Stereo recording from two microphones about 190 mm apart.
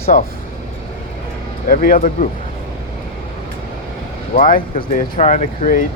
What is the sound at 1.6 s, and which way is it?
Speech, 45° left (ahead or behind).